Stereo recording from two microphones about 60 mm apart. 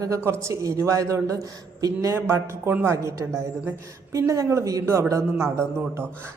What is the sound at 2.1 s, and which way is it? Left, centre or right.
A woman's voice, right.